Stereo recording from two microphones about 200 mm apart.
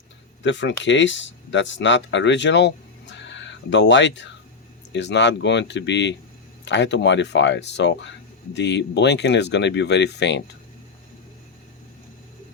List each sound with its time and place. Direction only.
0.4 s speech: 65° left (ahead or behind)